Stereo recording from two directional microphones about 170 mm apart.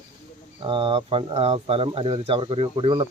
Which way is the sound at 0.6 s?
30° right (ahead or behind).